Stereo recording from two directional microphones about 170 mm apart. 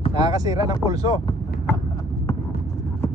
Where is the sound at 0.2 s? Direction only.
20° right (ahead or behind).